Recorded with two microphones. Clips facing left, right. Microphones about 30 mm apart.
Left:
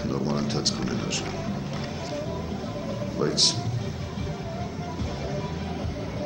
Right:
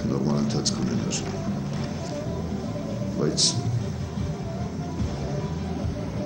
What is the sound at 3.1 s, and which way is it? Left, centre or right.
Speech, centre.